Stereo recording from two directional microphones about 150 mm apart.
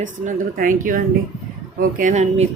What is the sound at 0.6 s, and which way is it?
Speech, 70° right (ahead or behind).